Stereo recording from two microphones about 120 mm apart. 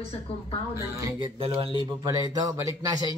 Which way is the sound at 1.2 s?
50° right (ahead or behind).